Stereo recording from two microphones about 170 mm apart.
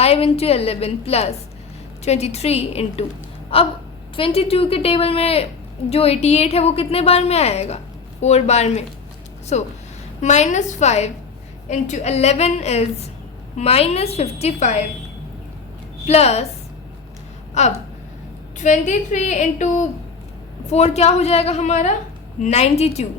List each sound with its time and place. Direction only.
0.0 s a woman's voice: 35° left (ahead or behind)
16.0 s a woman's voice: 40° left (ahead or behind)
17.5 s a sound: 40° left (ahead or behind)
18.6 s a woman's voice: 45° left (ahead or behind)